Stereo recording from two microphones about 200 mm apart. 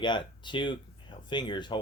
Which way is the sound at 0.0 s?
25° left (ahead or behind).